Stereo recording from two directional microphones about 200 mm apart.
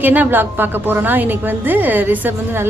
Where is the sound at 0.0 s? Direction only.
10° right (ahead or behind).